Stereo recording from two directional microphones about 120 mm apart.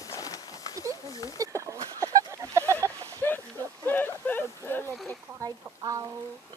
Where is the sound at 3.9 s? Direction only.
15° left (ahead or behind).